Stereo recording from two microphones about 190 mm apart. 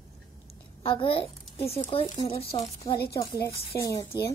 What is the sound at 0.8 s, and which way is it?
A child's voice, 25° left (ahead or behind).